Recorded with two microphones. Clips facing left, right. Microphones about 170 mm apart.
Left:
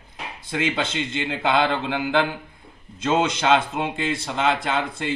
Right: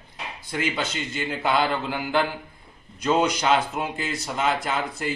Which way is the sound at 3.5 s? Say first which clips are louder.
Left 2 dB; 25° left (ahead or behind).